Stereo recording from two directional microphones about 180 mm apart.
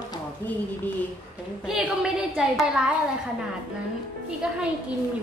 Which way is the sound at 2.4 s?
5° right (ahead or behind).